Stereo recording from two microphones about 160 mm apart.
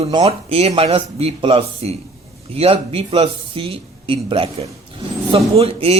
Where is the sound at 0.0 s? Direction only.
35° right (ahead or behind).